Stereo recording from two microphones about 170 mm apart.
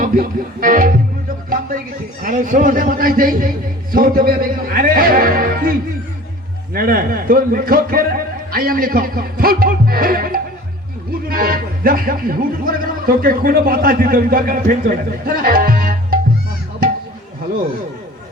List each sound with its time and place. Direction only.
0.0 s speech: 55° right (ahead or behind)
2.2 s speech: 50° right (ahead or behind)
6.7 s speech: 60° right (ahead or behind)